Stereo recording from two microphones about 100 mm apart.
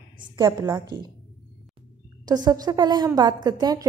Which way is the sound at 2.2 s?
40° right (ahead or behind).